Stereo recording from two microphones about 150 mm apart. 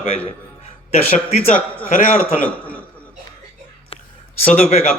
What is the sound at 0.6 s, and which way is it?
Speech, 45° left (ahead or behind).